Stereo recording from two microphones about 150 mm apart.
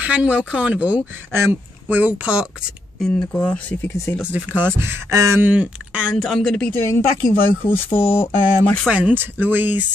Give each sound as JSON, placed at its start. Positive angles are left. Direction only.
{"t": 0.0, "sound": "speech", "side_deg": -10}
{"t": 3.2, "sound": "speech", "side_deg": 10}
{"t": 4.2, "sound": "speech", "side_deg": -10}
{"t": 6.8, "sound": "speech", "side_deg": 20}
{"t": 8.8, "sound": "speech", "side_deg": -10}